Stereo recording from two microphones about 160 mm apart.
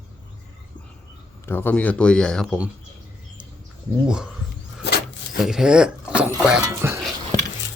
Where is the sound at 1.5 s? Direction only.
15° left (ahead or behind).